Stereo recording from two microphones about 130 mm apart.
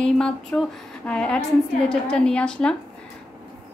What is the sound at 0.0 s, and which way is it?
A woman's voice, 5° left (ahead or behind).